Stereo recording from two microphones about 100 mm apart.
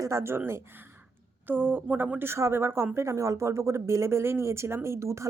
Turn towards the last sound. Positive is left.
turn(degrees=-30)  # may be behind; listen again after turning